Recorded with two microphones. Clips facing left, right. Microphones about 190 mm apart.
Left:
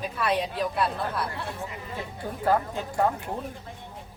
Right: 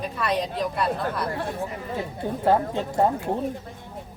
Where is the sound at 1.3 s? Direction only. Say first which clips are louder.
Right 6 dB; 45° right (ahead or behind).